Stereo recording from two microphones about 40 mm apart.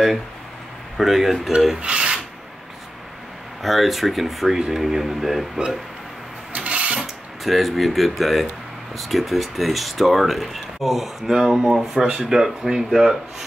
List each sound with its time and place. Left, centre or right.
0.9 s speech: centre
1.8 s filing: right
3.6 s speech: centre
6.5 s mechanisms: right
7.0 s a sound: centre
8.9 s speech: centre